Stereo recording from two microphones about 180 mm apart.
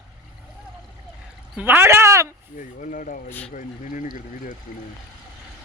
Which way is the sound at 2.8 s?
50° left (ahead or behind).